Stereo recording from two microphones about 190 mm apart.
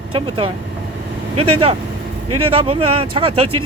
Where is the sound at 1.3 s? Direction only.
30° right (ahead or behind).